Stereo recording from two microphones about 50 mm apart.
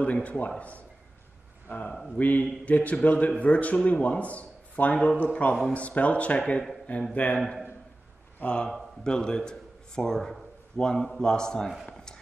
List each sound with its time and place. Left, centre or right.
0.0 s speech: left
8.4 s speech: left
9.0 s a man's voice: centre
11.8 s a sound: centre